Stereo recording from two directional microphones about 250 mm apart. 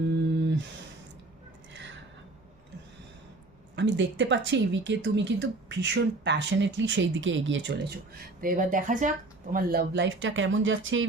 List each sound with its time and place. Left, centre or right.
0.3 s a sound: right
3.8 s speech: right
8.4 s speech: right